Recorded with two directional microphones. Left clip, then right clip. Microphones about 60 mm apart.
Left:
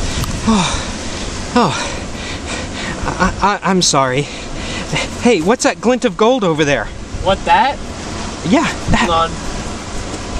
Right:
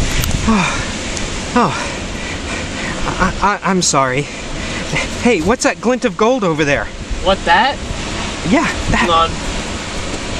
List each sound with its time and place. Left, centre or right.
0.5 s speech: left
3.1 s speech: left
7.2 s speech: centre
8.5 s speech: left